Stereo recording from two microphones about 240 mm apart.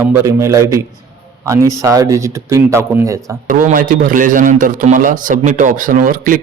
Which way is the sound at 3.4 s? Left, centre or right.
Right.